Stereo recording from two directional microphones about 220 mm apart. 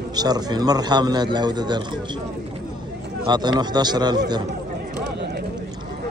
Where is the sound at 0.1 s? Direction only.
20° right (ahead or behind).